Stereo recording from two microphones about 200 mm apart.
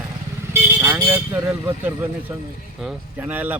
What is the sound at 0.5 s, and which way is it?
Speech, 10° right (ahead or behind).